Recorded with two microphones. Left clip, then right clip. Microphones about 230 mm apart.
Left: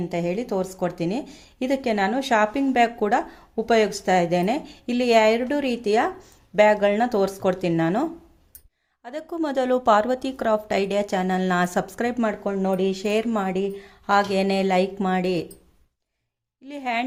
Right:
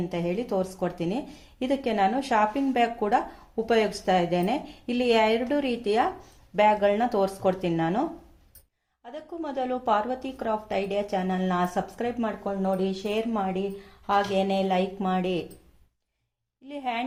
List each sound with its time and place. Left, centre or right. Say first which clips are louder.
0.1 s speech: left 4 dB; left
9.0 s a woman's voice: left 7 dB; left
16.6 s speech: left 4 dB; left